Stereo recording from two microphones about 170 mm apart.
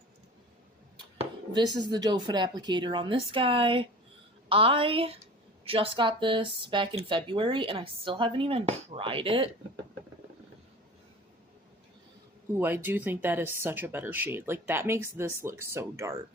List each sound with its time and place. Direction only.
1.2 s speech: 25° right (ahead or behind)
12.5 s speech: 10° right (ahead or behind)